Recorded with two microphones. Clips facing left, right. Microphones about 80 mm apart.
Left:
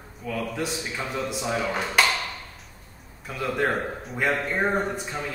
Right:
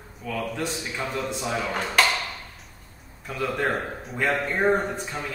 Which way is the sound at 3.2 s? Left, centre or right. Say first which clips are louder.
Even; centre.